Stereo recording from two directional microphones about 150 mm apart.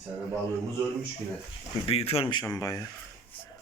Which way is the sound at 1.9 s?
40° left (ahead or behind).